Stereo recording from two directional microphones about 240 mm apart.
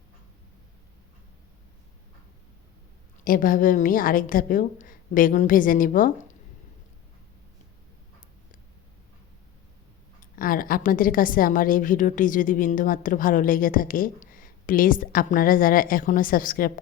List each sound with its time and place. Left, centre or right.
3.2 s a woman's voice: left
10.2 s a woman's voice: left